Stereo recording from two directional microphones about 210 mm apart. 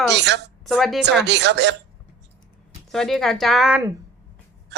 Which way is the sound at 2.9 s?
Centre (ahead or behind).